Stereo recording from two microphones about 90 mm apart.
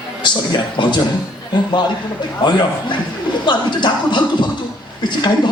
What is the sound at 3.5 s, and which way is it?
Speech, 55° left (ahead or behind).